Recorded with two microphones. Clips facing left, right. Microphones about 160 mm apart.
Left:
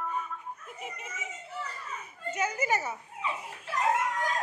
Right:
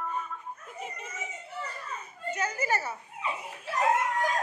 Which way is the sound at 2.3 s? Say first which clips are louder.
Left 1 dB; 20° left (ahead or behind).